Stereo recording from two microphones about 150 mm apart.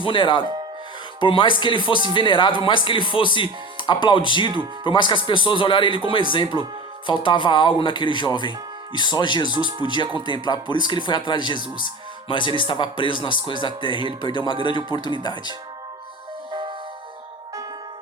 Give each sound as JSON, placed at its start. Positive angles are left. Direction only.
{"t": 0.0, "sound": "speech", "side_deg": 35}